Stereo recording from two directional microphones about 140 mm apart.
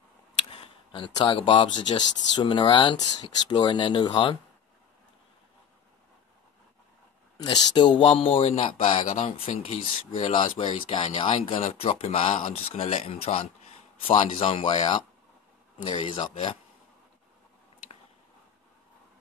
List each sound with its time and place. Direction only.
0.5 s speech: 40° left (ahead or behind)
7.4 s speech: 35° left (ahead or behind)